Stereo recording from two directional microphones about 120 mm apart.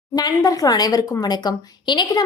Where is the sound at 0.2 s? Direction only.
30° left (ahead or behind).